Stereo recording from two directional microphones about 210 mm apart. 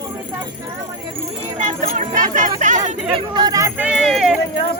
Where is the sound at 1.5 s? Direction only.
35° right (ahead or behind).